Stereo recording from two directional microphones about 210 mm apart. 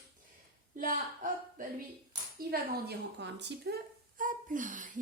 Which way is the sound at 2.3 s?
45° right (ahead or behind).